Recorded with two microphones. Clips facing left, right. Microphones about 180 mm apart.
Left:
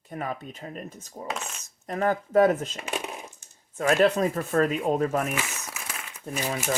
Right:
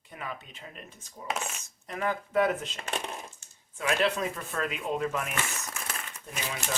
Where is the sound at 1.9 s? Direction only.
40° left (ahead or behind).